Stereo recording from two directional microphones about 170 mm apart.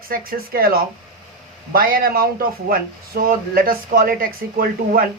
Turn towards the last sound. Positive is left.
turn(degrees=-60)  # may be behind; listen again after turning